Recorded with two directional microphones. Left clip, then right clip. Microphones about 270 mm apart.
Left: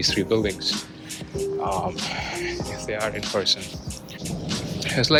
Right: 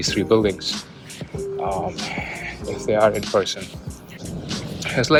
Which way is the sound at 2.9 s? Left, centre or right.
Centre.